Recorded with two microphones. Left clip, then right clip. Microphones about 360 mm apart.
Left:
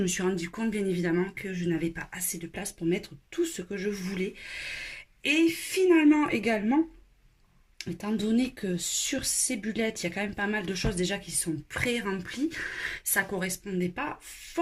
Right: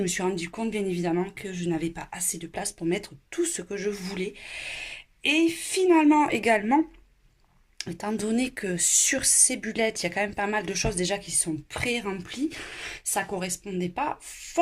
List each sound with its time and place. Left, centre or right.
0.0 s speech: centre
8.0 s speech: centre